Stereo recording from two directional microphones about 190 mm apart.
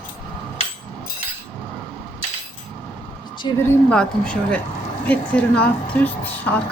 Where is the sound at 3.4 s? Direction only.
25° left (ahead or behind).